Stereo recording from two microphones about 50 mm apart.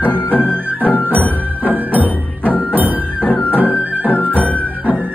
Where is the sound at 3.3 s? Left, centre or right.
Left.